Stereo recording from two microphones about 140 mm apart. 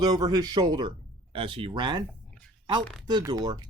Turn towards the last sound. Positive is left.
turn(degrees=-30)  # may be behind; listen again after turning